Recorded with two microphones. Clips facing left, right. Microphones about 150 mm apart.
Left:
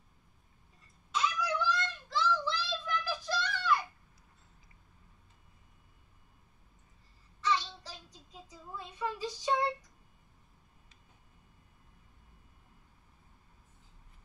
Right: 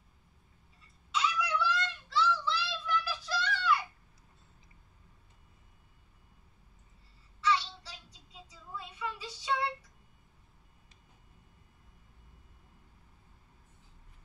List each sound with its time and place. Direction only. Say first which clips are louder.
1.1 s child singing: even; 45° left (ahead or behind)
7.4 s child singing: right 2 dB; 45° left (ahead or behind)